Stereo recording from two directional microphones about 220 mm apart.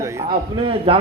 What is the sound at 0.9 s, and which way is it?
Speech, 25° right (ahead or behind).